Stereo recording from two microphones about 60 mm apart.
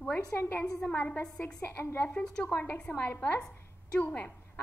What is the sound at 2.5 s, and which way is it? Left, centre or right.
Speech, left.